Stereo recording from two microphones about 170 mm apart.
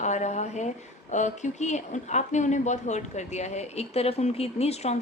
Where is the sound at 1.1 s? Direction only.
45° left (ahead or behind).